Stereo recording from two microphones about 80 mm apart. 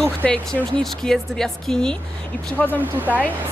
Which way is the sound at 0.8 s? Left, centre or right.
Centre.